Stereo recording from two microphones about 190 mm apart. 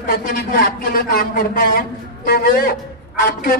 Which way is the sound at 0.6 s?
50° left (ahead or behind).